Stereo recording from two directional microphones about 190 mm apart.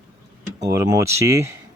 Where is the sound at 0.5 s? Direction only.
20° right (ahead or behind).